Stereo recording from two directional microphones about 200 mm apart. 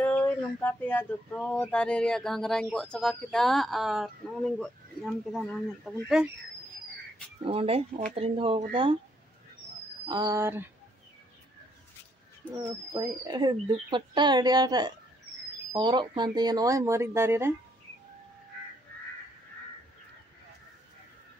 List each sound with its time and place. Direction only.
0.0 s speech: 10° left (ahead or behind)
7.4 s speech: 30° right (ahead or behind)
10.0 s speech: 20° right (ahead or behind)
12.9 s speech: 20° right (ahead or behind)